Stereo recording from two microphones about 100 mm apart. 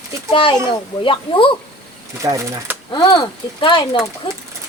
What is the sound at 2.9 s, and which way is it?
Speech, 45° left (ahead or behind).